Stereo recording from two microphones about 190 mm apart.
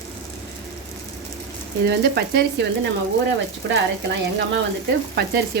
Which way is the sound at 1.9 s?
55° right (ahead or behind).